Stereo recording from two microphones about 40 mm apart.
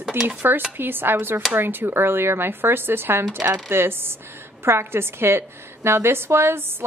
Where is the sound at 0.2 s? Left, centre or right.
Right.